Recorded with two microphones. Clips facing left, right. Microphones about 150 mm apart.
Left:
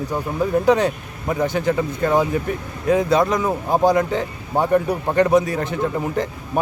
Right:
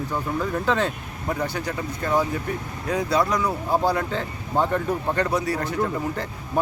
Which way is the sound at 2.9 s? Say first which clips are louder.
Left 6 dB; 20° left (ahead or behind).